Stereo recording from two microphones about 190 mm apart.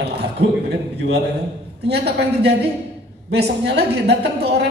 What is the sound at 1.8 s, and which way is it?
A woman's voice, 60° right (ahead or behind).